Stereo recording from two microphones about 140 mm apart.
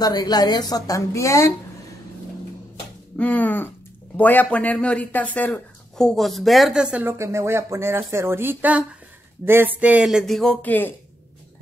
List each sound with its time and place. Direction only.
0.0 s a woman's voice: 30° left (ahead or behind)
3.2 s speech: 10° left (ahead or behind)